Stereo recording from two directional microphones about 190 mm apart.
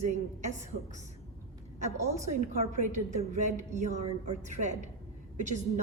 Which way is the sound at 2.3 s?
40° right (ahead or behind).